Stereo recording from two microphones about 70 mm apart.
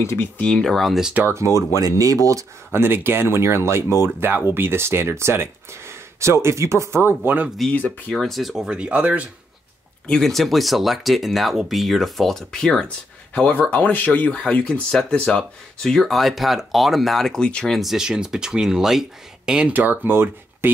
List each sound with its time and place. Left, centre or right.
0.0 s speech: left
0.4 s speech: centre
1.2 s speech: right
2.7 s speech: right
8.1 s speech: centre
8.6 s speech: centre
10.0 s speech: centre
13.5 s speech: left; by 17.7 s centre
17.7 s speech: centre
19.8 s speech: right